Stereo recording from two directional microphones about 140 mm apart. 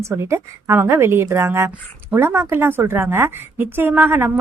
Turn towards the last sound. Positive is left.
turn(degrees=-15)  # may be behind; listen again after turning